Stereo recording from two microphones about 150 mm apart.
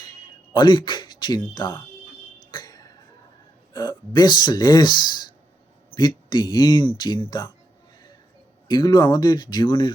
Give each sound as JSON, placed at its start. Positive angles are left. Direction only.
{"t": 0.5, "sound": "speech", "side_deg": 30}
{"t": 2.5, "sound": "a sound", "side_deg": 25}
{"t": 3.7, "sound": "speech", "side_deg": 30}
{"t": 8.6, "sound": "speech", "side_deg": 30}